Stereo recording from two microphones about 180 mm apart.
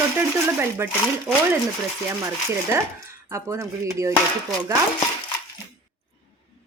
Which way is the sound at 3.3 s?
15° right (ahead or behind).